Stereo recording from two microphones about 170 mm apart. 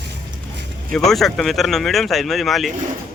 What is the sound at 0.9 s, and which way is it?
Speech, centre (ahead or behind).